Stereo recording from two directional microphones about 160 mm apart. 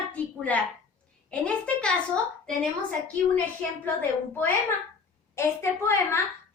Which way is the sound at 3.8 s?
15° left (ahead or behind).